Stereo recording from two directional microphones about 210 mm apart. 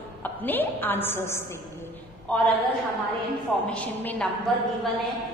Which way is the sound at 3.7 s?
5° left (ahead or behind).